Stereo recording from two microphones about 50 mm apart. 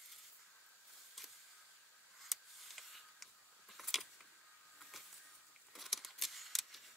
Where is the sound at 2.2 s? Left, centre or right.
Centre.